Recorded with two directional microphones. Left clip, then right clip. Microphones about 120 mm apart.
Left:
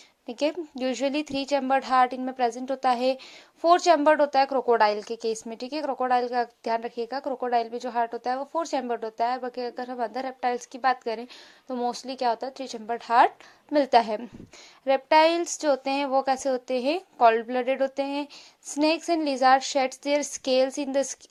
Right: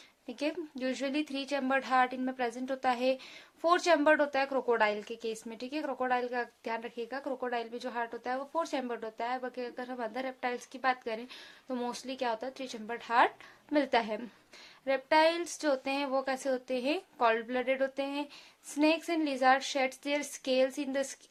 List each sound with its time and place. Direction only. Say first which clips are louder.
0.3 s a woman's voice: left 8 dB; 40° left (ahead or behind)
11.7 s a woman's voice: left 8 dB; 30° left (ahead or behind)